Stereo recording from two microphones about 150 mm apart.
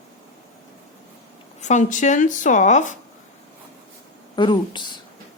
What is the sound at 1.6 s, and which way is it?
A woman's voice, 55° left (ahead or behind).